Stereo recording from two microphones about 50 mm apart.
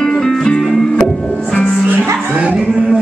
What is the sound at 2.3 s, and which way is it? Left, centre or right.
Music, centre.